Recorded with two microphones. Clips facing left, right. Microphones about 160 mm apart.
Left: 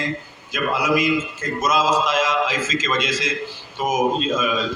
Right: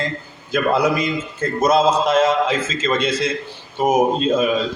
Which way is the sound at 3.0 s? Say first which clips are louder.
Right 4 dB; 90° left.